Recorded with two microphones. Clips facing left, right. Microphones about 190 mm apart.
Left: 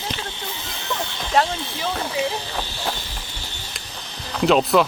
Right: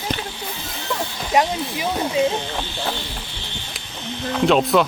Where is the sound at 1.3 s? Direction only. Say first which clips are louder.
Right 2 dB; 15° right (ahead or behind).